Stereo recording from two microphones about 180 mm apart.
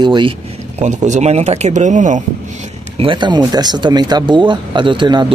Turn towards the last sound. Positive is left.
turn(degrees=-25)  # may be behind; listen again after turning